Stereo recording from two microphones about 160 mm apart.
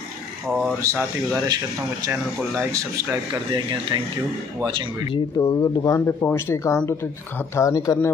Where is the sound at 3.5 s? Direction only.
30° right (ahead or behind).